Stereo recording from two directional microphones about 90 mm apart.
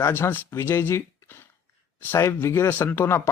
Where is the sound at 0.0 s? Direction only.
25° left (ahead or behind).